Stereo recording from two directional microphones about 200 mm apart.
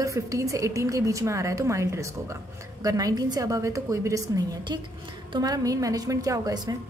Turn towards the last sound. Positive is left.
turn(degrees=-20)  # may be behind; listen again after turning